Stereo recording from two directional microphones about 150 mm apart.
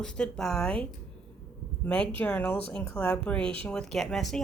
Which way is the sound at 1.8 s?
10° left (ahead or behind).